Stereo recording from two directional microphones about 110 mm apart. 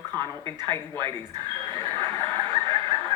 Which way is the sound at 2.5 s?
45° right (ahead or behind).